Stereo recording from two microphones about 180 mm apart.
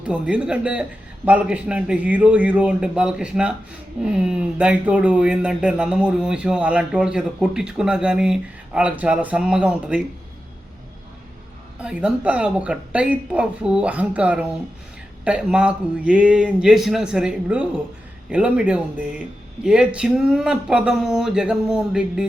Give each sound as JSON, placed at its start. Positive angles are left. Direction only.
{"t": 0.0, "sound": "a man's voice", "side_deg": -5}
{"t": 11.8, "sound": "a man's voice", "side_deg": -5}